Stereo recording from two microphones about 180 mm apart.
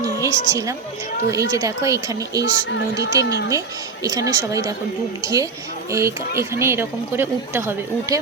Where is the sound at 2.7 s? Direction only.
80° left.